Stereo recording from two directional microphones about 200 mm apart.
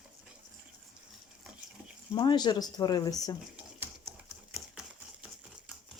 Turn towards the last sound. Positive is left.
turn(degrees=-5)  # may be behind; listen again after turning